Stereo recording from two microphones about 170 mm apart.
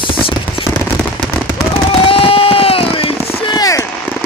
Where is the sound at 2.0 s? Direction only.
35° left (ahead or behind).